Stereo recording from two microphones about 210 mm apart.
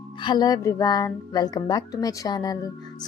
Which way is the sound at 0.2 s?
20° left (ahead or behind).